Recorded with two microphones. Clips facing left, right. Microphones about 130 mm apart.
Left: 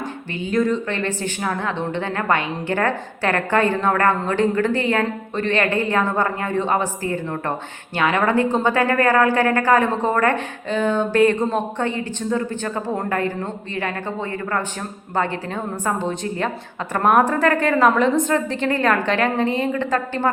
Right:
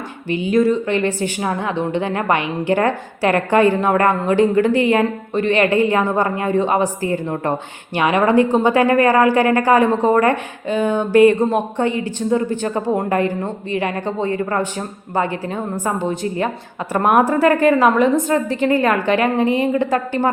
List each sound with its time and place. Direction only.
0.3 s a woman's voice: 15° right (ahead or behind)
15.1 s a woman's voice: 10° right (ahead or behind)